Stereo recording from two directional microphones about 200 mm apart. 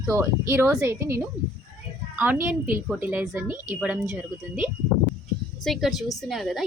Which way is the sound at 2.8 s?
5° right (ahead or behind).